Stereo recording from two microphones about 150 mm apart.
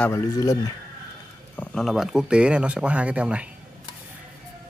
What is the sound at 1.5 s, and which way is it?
Speech, 5° left (ahead or behind).